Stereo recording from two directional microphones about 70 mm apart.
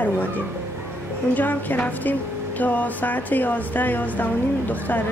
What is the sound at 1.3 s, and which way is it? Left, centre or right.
Speech, left.